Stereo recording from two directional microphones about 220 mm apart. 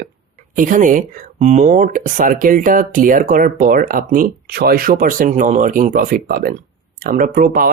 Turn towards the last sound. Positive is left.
turn(degrees=-40)  # may be behind; listen again after turning